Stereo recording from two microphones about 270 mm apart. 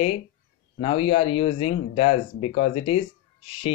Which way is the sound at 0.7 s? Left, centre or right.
Left.